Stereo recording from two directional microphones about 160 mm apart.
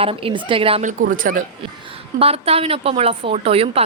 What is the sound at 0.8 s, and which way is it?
Speech, 60° right (ahead or behind).